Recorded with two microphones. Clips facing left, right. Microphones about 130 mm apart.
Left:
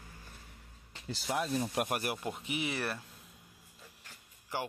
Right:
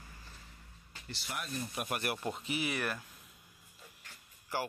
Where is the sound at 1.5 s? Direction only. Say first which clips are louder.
Left 7 dB; 80° left.